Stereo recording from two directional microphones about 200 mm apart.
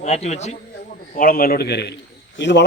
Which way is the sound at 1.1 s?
45° left (ahead or behind).